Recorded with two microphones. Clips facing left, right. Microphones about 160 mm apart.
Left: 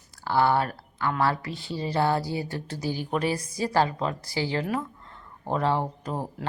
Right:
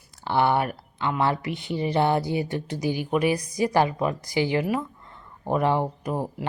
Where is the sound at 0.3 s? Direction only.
20° right (ahead or behind).